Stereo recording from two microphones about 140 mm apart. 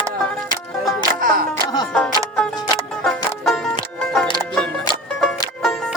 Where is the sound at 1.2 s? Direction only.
90° right.